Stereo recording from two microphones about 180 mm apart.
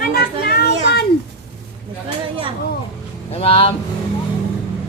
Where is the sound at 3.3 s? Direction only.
35° left (ahead or behind).